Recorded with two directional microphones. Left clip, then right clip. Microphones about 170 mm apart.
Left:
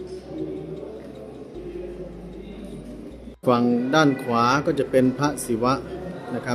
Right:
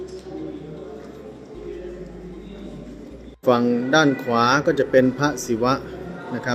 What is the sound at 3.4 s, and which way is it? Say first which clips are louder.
Speech: right 2 dB; centre (ahead or behind).